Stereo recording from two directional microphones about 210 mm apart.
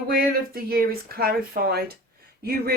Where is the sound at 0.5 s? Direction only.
45° right (ahead or behind).